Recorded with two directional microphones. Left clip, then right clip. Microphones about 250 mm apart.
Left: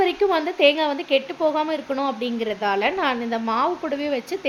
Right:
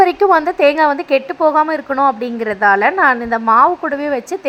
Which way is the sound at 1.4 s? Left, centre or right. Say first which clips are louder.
Right 9 dB; right.